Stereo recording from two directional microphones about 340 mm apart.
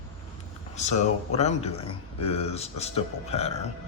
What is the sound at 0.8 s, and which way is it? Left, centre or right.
Speech, centre.